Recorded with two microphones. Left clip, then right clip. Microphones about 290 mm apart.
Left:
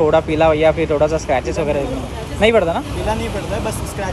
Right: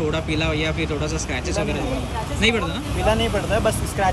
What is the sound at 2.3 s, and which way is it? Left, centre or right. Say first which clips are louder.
Speech: left 8 dB; centre.